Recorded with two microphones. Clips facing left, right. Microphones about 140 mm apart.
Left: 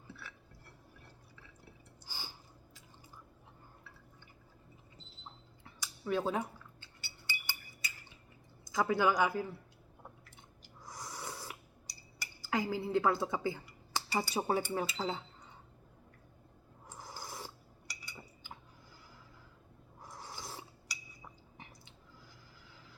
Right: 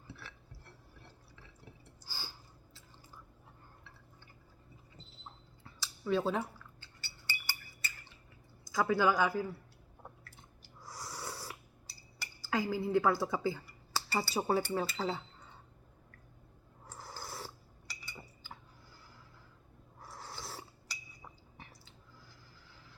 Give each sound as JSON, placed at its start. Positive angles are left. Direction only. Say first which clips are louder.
{"t": 2.0, "sound": "a sound", "louder": "even", "side_deg": 20}
{"t": 5.6, "sound": "cutlery", "louder": "right 2 dB", "side_deg": 15}
{"t": 8.7, "sound": "speech", "louder": "right 1 dB", "side_deg": 20}
{"t": 10.8, "sound": "a sound", "louder": "right 1 dB", "side_deg": 20}
{"t": 12.2, "sound": "cutlery", "louder": "right 1 dB", "side_deg": 20}
{"t": 12.9, "sound": "speech", "louder": "right 1 dB", "side_deg": 20}
{"t": 16.8, "sound": "filing", "louder": "right 1 dB", "side_deg": 15}
{"t": 20.0, "sound": "filing", "louder": "even", "side_deg": 15}